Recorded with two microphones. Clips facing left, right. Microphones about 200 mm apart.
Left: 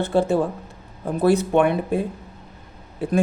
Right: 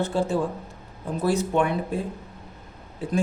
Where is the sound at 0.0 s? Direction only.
60° left (ahead or behind).